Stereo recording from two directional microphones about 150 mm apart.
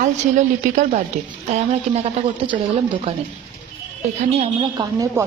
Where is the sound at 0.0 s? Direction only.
55° right (ahead or behind); by 2.6 s 40° right (ahead or behind).